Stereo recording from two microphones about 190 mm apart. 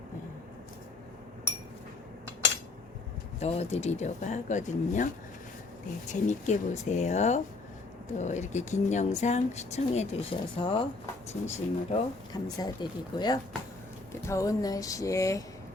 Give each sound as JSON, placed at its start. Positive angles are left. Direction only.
{"t": 3.4, "sound": "speech", "side_deg": 35}
{"t": 6.1, "sound": "speech", "side_deg": 40}
{"t": 12.3, "sound": "speech", "side_deg": 20}